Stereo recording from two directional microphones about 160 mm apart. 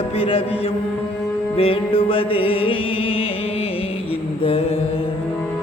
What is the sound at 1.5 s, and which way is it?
Music, 35° left (ahead or behind).